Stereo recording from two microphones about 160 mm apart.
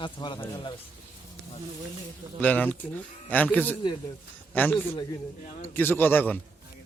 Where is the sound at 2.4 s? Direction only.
10° left (ahead or behind).